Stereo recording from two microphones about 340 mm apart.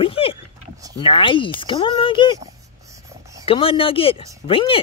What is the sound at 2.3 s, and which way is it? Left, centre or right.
Dog, centre.